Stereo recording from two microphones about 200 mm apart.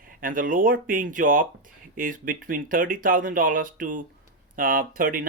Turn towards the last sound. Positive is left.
turn(degrees=-45)  # may be behind; listen again after turning